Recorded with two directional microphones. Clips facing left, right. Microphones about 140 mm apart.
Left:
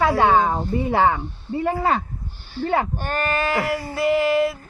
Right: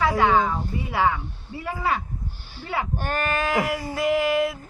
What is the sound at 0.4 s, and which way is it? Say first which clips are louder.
A woman's voice: left 6 dB; 50° left (ahead or behind).